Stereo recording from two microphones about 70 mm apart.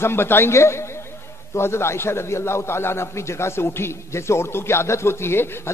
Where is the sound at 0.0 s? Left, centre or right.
Left.